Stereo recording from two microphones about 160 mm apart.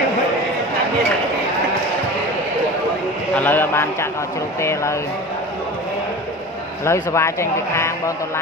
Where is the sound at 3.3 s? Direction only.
10° left (ahead or behind).